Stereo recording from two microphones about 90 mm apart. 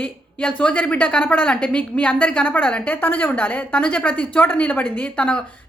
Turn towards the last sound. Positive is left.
turn(degrees=15)  # may be behind; listen again after turning